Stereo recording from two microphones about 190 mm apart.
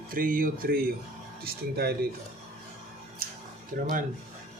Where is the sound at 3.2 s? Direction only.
50° right (ahead or behind).